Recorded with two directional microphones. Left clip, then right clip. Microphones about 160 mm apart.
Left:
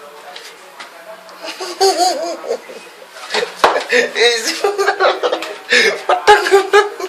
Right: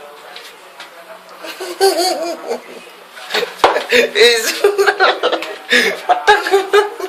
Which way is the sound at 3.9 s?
20° right (ahead or behind).